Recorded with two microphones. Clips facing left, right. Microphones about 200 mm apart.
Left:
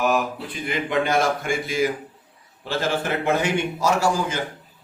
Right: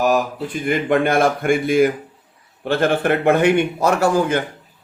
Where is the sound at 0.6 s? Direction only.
50° right (ahead or behind).